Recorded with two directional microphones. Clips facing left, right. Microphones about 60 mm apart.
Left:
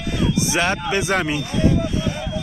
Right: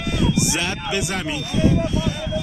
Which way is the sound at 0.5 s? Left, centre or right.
Left.